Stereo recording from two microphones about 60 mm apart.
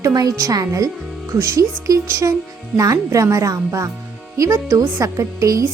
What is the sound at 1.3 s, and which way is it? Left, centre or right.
Speech, right.